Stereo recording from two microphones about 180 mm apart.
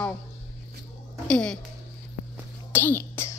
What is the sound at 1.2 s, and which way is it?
Speech, 5° left (ahead or behind).